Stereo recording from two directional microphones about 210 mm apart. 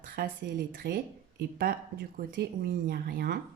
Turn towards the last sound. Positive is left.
turn(degrees=-45)  # may be behind; listen again after turning